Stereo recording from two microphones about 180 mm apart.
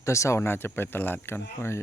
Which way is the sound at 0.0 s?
15° left (ahead or behind).